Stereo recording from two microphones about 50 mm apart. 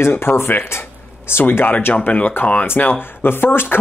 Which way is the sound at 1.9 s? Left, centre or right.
Left.